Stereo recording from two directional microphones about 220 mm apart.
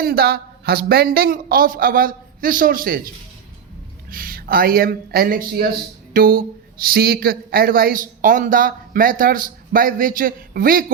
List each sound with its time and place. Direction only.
0.0 s speech: 45° right (ahead or behind)
4.1 s speech: 40° right (ahead or behind)